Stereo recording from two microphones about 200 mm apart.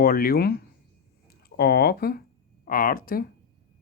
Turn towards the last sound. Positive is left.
turn(degrees=45)  # may be behind; listen again after turning